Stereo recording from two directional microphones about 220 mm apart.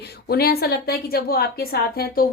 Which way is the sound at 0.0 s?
45° left (ahead or behind).